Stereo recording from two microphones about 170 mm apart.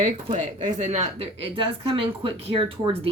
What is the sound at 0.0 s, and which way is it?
A woman's voice, 45° right (ahead or behind).